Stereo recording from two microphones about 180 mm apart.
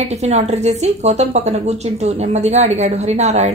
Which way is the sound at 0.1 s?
40° right (ahead or behind).